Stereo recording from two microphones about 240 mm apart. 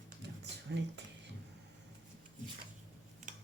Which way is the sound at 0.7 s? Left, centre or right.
Right.